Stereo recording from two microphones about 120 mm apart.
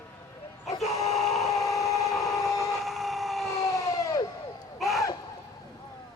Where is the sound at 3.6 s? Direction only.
30° left (ahead or behind).